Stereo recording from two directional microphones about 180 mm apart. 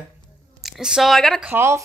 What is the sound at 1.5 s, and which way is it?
Speech, 15° right (ahead or behind).